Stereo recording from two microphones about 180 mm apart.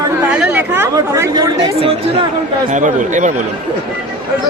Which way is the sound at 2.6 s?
45° right (ahead or behind).